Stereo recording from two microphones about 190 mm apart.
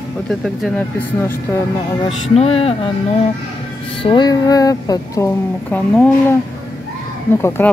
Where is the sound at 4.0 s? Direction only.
25° left (ahead or behind); by 6.3 s 10° left (ahead or behind).